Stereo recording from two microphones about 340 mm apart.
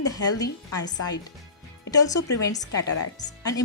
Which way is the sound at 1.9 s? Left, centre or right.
Centre.